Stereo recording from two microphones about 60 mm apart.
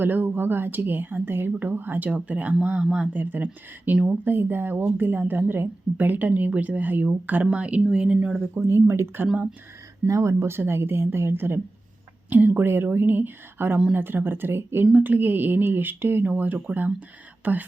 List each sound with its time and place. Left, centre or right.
0.0 s a woman's voice: right; by 3.1 s centre
3.1 s a woman's voice: right
3.9 s speech: right
4.2 s a woman's voice: right; by 8.6 s centre
8.6 s a woman's voice: right